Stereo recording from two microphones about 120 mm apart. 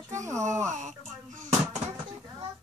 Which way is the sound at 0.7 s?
90° right.